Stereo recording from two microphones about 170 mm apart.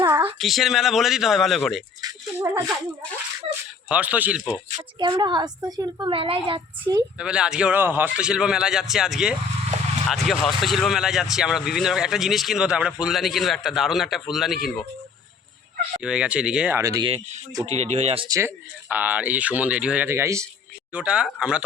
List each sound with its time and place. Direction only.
0.0 s a sound: 10° right (ahead or behind)
0.3 s speech: centre (ahead or behind)
2.0 s speech: 20° right (ahead or behind)
3.8 s speech: 10° right (ahead or behind)
4.8 s a woman's voice: 25° right (ahead or behind)
6.1 s speech: 35° right (ahead or behind)
6.9 s a woman's voice: 20° right (ahead or behind)
7.2 s speech: 5° right (ahead or behind)
16.0 s speech: 5° right (ahead or behind)
16.8 s a woman's voice: 20° right (ahead or behind)
17.7 s speech: 40° right (ahead or behind)
18.3 s speech: 15° right (ahead or behind)